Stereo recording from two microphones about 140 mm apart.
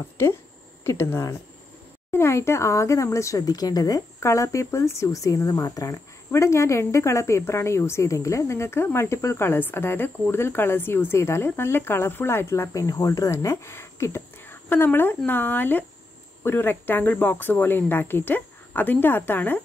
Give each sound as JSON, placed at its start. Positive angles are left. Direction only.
{"t": 0.8, "sound": "speech", "side_deg": 20}